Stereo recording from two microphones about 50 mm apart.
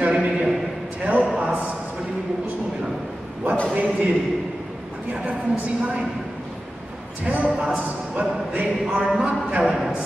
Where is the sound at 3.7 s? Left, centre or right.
Right.